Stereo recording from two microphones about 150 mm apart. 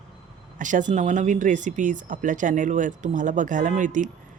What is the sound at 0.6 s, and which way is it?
Speech, 60° right (ahead or behind).